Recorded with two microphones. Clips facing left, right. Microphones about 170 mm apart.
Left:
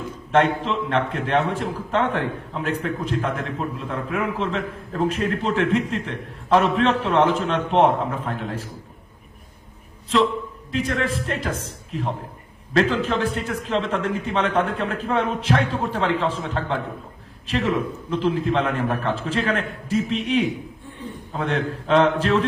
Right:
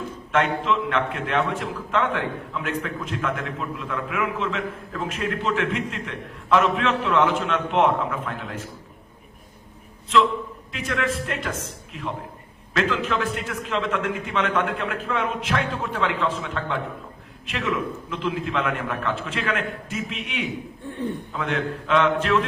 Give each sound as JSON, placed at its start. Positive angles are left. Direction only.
{"t": 0.3, "sound": "a man's voice", "side_deg": 35}
{"t": 10.7, "sound": "a man's voice", "side_deg": 30}